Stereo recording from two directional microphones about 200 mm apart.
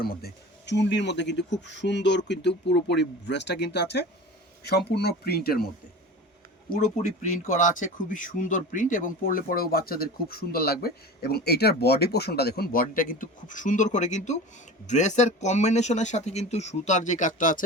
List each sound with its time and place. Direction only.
0.0 s speech: 50° left (ahead or behind)
6.7 s speech: 40° left (ahead or behind)